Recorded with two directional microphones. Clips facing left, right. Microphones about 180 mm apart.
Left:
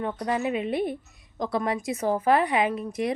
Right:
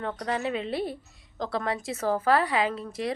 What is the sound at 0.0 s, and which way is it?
A woman's voice, 15° left (ahead or behind).